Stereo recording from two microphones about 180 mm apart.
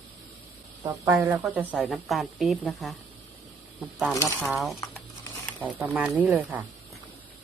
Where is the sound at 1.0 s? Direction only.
15° right (ahead or behind).